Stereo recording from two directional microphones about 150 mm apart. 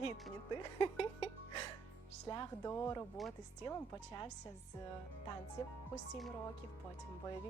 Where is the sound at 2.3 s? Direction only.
25° left (ahead or behind).